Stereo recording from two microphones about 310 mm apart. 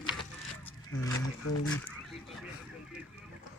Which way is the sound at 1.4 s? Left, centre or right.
Left.